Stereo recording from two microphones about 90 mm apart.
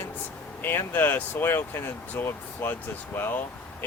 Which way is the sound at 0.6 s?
25° left (ahead or behind).